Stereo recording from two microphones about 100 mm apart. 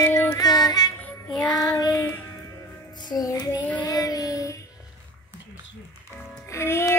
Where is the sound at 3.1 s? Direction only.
40° left (ahead or behind).